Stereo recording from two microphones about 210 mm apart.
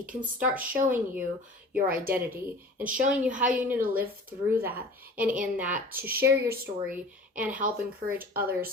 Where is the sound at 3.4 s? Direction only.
5° right (ahead or behind).